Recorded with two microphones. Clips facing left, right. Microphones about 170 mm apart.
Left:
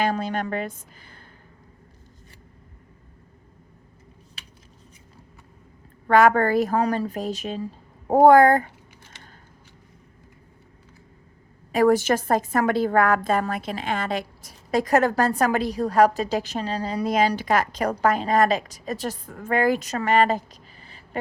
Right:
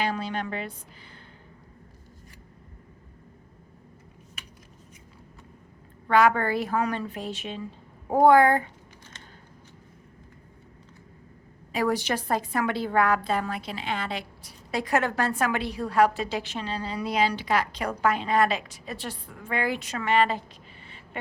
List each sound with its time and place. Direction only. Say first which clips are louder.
0.0 s a woman's voice: left 4 dB; 45° left (ahead or behind)
6.1 s a woman's voice: left 4 dB; 45° left (ahead or behind)
11.7 s a woman's voice: left 7 dB; 45° left (ahead or behind)
20.8 s a sound: left 5 dB; 35° left (ahead or behind)